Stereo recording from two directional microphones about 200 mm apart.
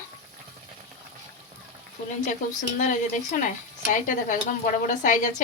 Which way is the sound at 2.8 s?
40° left (ahead or behind).